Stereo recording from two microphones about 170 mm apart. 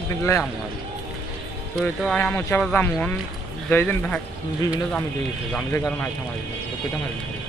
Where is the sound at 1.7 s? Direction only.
5° left (ahead or behind).